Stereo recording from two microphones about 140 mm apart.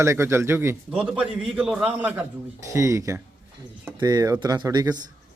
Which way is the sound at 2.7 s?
25° right (ahead or behind).